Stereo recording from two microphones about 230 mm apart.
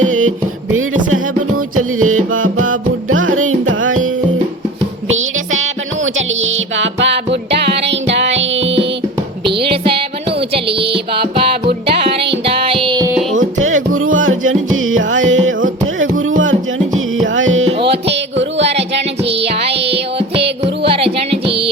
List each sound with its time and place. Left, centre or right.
0.1 s music: right
9.5 s music: right
11.1 s music: right
13.6 s music: right
17.7 s music: right
18.5 s a sound: right
18.9 s music: right
20.8 s music: right